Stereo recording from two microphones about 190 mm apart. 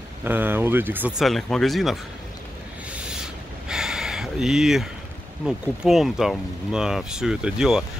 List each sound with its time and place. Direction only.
0.2 s speech: 10° right (ahead or behind)
2.9 s a sound: 5° right (ahead or behind)
5.4 s speech: 5° right (ahead or behind)